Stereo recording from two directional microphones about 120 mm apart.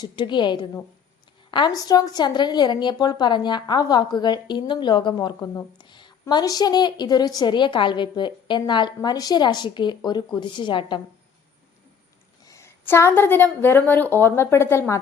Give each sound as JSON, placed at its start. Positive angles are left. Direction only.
{"t": 0.0, "sound": "a woman's voice", "side_deg": 40}
{"t": 12.5, "sound": "a woman's voice", "side_deg": 25}